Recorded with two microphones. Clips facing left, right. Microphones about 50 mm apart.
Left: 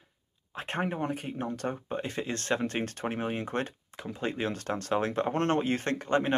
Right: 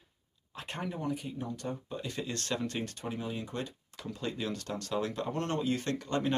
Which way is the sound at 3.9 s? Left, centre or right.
Left.